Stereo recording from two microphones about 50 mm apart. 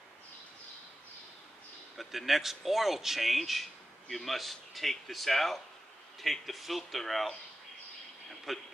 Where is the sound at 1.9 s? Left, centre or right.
Centre.